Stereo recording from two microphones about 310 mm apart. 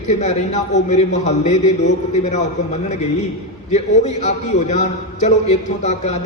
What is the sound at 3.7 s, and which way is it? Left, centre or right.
A man's voice, left.